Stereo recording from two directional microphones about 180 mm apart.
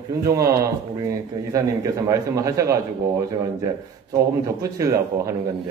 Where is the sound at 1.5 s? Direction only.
20° right (ahead or behind).